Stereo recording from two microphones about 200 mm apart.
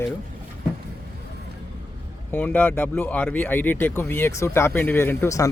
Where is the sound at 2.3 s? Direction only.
10° left (ahead or behind).